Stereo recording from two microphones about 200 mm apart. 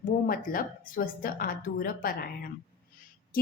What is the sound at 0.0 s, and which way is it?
A woman's voice, 45° left (ahead or behind).